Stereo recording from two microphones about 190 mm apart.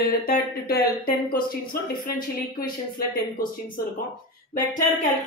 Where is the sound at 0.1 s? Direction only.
55° left (ahead or behind).